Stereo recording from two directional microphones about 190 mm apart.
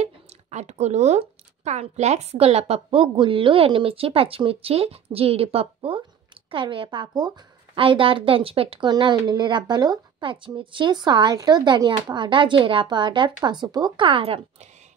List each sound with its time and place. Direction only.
0.0 s a woman's voice: 35° right (ahead or behind)